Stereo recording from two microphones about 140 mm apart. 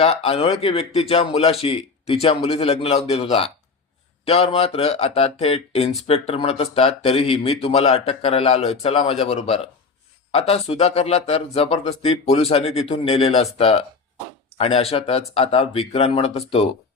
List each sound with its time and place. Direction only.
0.0 s speech: 45° left (ahead or behind)